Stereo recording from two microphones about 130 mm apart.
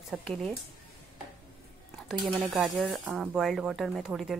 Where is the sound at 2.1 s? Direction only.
Centre (ahead or behind).